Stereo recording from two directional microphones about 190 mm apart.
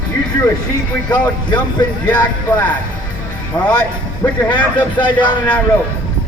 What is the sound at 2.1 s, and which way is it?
Speech, 20° left (ahead or behind).